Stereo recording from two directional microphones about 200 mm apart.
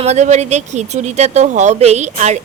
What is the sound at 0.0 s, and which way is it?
A woman's voice, 35° right (ahead or behind).